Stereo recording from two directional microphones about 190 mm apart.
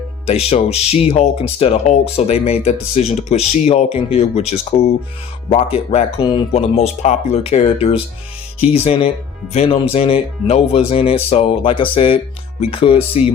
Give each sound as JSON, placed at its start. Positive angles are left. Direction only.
{"t": 0.3, "sound": "speech", "side_deg": 30}